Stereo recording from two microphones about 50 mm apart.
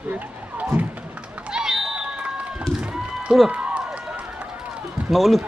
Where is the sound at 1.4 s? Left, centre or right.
Centre.